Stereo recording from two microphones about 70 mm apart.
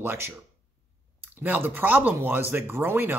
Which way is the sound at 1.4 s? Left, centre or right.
Right.